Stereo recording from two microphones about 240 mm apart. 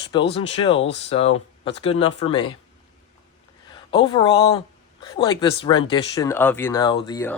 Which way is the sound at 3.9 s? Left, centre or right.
Centre.